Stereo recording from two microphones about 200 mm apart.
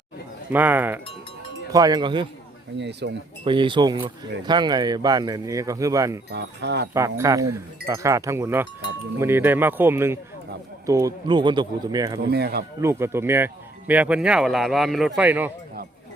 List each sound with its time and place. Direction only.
0.5 s speech: 10° right (ahead or behind)
2.7 s speech: 60° right (ahead or behind)
3.4 s speech: 25° right (ahead or behind)
6.3 s speech: 60° right (ahead or behind)
6.9 s speech: 15° right (ahead or behind)
12.3 s speech: 55° right (ahead or behind)
12.8 s speech: 10° right (ahead or behind)